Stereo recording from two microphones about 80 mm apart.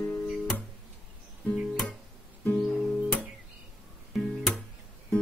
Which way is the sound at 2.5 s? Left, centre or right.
Centre.